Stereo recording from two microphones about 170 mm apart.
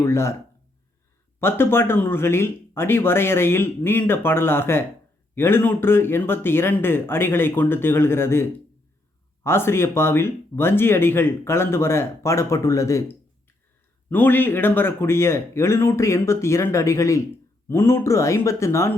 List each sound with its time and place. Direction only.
0.0 s speech: 15° left (ahead or behind)
1.4 s speech: 15° left (ahead or behind)